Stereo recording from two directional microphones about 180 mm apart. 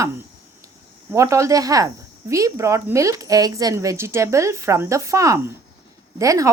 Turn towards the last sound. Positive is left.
turn(degrees=-20)  # may be behind; listen again after turning